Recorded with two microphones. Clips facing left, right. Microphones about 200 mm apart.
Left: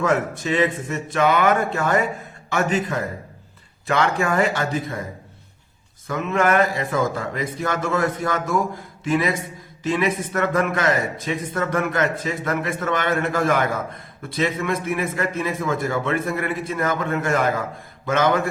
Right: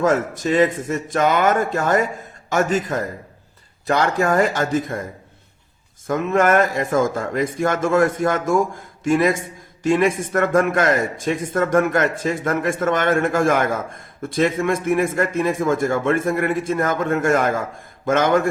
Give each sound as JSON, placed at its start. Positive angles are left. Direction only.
{"t": 0.0, "sound": "a man's voice", "side_deg": -40}
{"t": 6.1, "sound": "a man's voice", "side_deg": -45}